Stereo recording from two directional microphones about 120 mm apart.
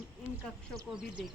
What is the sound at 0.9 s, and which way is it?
Speech, 5° right (ahead or behind).